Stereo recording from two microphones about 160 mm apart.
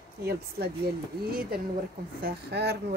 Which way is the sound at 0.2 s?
90° right.